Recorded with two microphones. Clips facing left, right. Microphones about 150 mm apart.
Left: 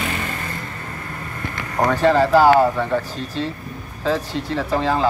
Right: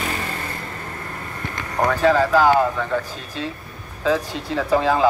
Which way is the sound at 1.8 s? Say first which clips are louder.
Left 1 dB; 15° left (ahead or behind).